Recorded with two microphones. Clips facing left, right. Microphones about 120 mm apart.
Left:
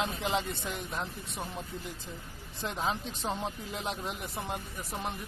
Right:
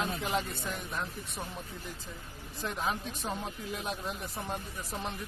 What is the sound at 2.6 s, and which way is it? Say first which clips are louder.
Speech: left 1 dB; 25° left (ahead or behind).